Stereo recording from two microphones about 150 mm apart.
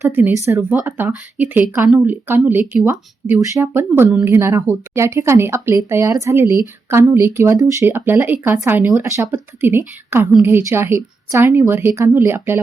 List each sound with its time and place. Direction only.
0.0 s a woman's voice: 15° right (ahead or behind)